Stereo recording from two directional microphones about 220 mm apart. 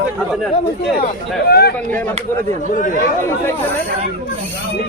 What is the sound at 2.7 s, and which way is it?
Speech, 35° left (ahead or behind).